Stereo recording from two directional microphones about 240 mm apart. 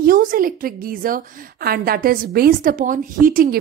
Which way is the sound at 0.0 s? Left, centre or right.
Right.